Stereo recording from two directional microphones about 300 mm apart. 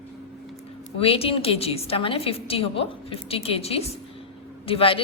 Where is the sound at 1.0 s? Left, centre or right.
Centre.